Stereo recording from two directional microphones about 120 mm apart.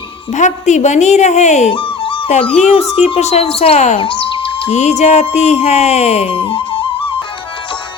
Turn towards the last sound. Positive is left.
turn(degrees=50)  # may be behind; listen again after turning